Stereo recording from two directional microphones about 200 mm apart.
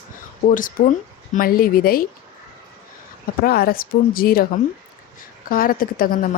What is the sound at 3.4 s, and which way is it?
Speech, 50° left (ahead or behind).